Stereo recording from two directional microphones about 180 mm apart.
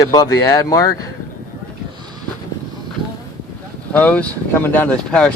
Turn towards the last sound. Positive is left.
turn(degrees=5)  # may be behind; listen again after turning